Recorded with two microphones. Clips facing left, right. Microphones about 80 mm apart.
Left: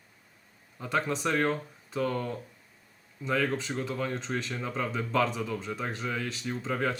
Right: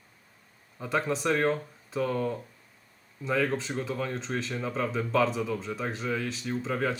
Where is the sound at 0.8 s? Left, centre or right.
Centre.